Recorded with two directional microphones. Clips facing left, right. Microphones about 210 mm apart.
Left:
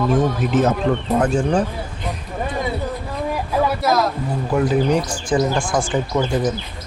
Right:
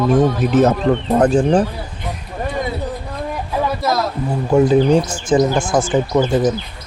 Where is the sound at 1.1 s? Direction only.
35° right (ahead or behind).